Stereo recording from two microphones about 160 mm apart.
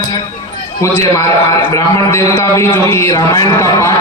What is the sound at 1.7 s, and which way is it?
A man's voice, 20° left (ahead or behind).